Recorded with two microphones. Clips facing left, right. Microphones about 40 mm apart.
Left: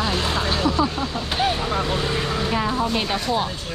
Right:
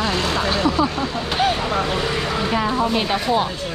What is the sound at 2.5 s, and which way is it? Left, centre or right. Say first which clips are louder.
Speech: right 3 dB; centre.